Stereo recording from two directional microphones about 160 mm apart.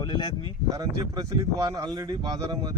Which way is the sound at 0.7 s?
20° right (ahead or behind).